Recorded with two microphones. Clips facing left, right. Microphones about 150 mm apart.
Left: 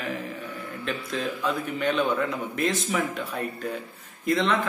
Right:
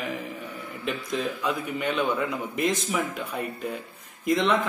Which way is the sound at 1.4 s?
10° right (ahead or behind).